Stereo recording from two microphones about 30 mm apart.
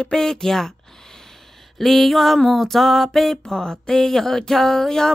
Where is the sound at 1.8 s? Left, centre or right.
Centre.